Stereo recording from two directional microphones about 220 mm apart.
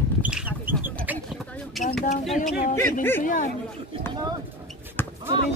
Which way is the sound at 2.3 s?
35° left (ahead or behind).